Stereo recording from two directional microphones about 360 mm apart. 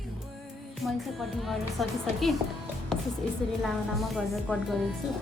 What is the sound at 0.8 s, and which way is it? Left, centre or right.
Speech, centre.